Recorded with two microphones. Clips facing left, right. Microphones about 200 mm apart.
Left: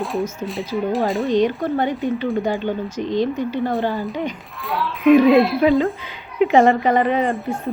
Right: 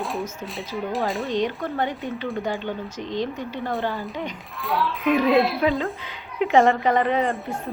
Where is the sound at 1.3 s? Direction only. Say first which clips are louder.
Left 7 dB; 15° left (ahead or behind).